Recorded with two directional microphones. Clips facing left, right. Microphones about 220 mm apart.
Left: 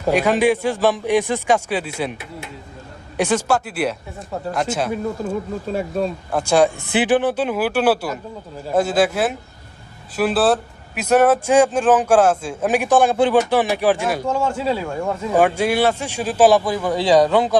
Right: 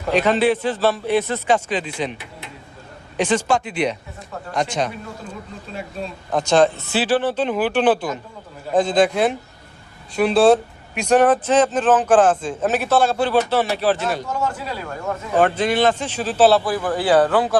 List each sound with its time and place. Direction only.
0.1 s speech: 10° left (ahead or behind)
3.2 s speech: 10° left (ahead or behind)
5.2 s speech: 45° left (ahead or behind)
6.3 s speech: 10° left (ahead or behind)
14.3 s speech: 25° left (ahead or behind)
15.4 s speech: 10° left (ahead or behind)